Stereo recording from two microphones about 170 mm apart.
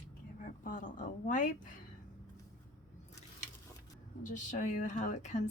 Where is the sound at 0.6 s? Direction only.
50° left (ahead or behind).